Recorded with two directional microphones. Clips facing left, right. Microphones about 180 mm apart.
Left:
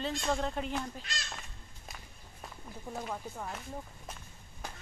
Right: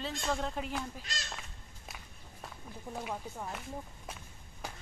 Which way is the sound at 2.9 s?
5° right (ahead or behind).